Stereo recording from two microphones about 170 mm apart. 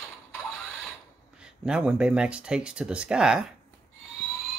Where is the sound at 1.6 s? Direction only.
5° right (ahead or behind).